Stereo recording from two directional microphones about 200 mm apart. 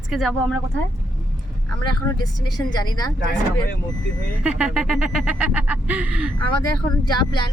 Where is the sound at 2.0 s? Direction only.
20° left (ahead or behind).